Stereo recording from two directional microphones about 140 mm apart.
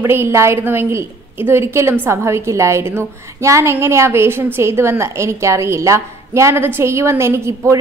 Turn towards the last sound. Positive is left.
turn(degrees=-20)  # may be behind; listen again after turning